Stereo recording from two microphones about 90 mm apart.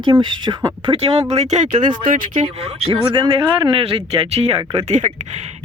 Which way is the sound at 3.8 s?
90° right.